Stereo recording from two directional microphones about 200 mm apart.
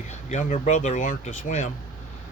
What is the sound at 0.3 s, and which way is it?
Speech, 35° left (ahead or behind).